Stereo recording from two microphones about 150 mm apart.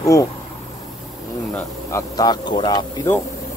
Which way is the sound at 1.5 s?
15° left (ahead or behind).